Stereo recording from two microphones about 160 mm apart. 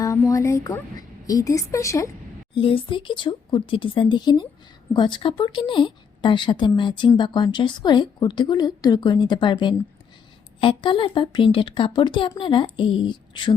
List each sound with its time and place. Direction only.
0.0 s a woman's voice: 20° left (ahead or behind)
2.6 s a woman's voice: 35° left (ahead or behind)